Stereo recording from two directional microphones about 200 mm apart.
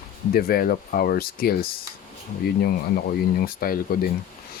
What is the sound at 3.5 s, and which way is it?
Speech, 45° left (ahead or behind).